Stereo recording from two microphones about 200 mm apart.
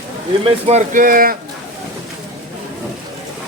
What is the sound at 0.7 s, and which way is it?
Speech, 40° right (ahead or behind).